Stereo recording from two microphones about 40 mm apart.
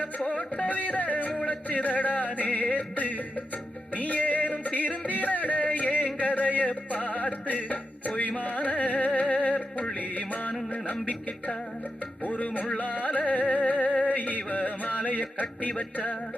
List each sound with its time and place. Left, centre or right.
0.3 s music: left
5.8 s a sound: left
6.1 s music: left